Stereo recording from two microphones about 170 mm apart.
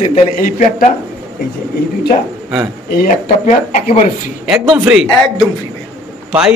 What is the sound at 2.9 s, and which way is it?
Speech, 55° left (ahead or behind).